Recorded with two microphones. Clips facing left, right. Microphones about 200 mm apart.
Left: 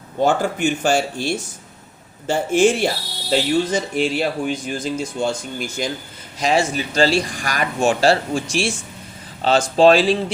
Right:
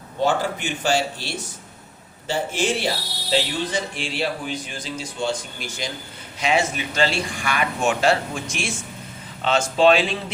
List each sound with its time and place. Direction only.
0.2 s speech: 45° left (ahead or behind)
6.4 s speech: 35° left (ahead or behind)